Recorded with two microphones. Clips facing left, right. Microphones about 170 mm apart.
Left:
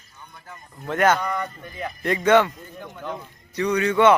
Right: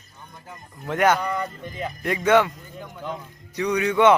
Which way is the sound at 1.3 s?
30° right (ahead or behind).